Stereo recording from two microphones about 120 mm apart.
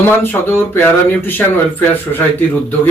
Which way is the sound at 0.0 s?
20° left (ahead or behind).